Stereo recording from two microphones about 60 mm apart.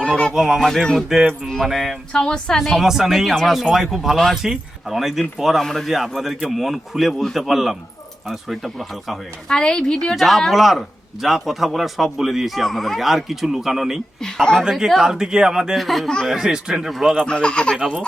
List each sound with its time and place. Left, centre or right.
0.3 s a man's voice: centre
1.3 s a woman's voice: centre
2.1 s a woman's voice: centre
2.8 s a man's voice: centre
9.5 s a woman's voice: centre
10.2 s a man's voice: centre
14.2 s a woman's voice: centre
14.6 s speech: centre
15.8 s a man's voice: centre
17.2 s a woman's voice: centre
17.7 s speech: centre